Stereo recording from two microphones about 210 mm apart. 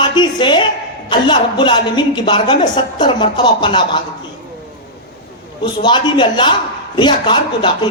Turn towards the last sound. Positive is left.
turn(degrees=20)  # may be behind; listen again after turning